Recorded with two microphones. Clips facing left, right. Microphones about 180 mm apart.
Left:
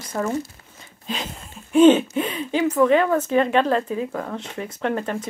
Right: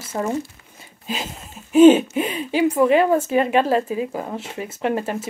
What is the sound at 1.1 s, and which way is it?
Speech, 5° right (ahead or behind).